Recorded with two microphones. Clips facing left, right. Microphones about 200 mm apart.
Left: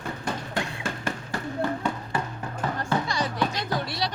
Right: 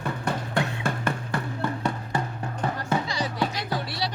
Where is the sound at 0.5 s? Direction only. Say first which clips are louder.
Right 4 dB; 55° right (ahead or behind).